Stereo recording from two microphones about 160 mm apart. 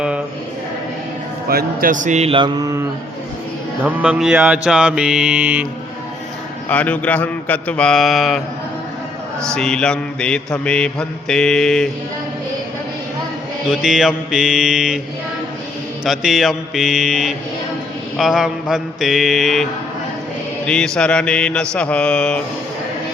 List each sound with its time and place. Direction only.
1.5 s a man's voice: 65° right (ahead or behind); by 2.8 s 20° right (ahead or behind)
3.8 s mantra: 5° right (ahead or behind)
6.7 s a man's voice: 10° left (ahead or behind)
9.6 s mantra: 5° left (ahead or behind)
13.7 s mantra: 5° right (ahead or behind)
16.0 s mantra: centre (ahead or behind)
20.7 s mantra: 5° left (ahead or behind)